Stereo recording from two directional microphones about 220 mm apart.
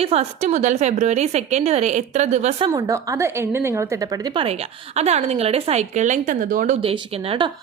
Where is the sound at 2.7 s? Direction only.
15° right (ahead or behind); by 6.8 s 35° right (ahead or behind).